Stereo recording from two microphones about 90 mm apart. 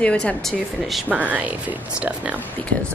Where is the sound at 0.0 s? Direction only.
10° left (ahead or behind).